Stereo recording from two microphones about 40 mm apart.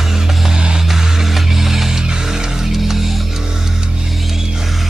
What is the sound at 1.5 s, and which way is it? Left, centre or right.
Music, centre.